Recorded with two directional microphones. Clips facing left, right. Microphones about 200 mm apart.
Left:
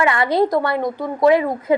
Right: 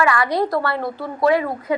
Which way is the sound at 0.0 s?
25° left (ahead or behind).